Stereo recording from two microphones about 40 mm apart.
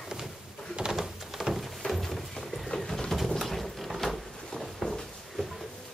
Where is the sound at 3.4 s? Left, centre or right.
Centre.